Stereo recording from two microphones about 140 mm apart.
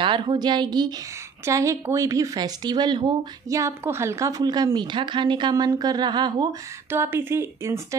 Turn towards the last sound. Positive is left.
turn(degrees=-20)  # may be behind; listen again after turning